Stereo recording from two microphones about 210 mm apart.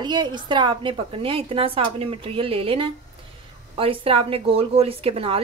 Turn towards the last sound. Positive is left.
turn(degrees=-25)  # may be behind; listen again after turning